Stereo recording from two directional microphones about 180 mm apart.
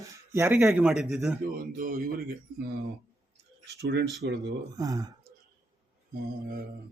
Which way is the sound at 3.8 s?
70° right (ahead or behind).